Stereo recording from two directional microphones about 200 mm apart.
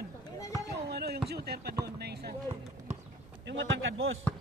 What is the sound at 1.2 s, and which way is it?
Speech, 55° right (ahead or behind).